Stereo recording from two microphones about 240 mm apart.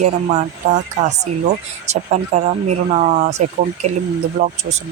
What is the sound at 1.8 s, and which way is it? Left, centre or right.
Speech, right.